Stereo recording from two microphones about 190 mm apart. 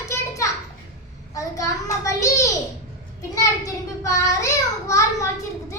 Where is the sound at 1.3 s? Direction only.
15° left (ahead or behind).